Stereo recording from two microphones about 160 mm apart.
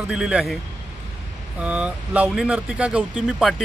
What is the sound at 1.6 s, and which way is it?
Speech, 10° right (ahead or behind).